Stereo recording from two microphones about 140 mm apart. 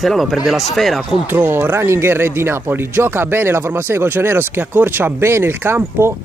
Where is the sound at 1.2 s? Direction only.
15° right (ahead or behind).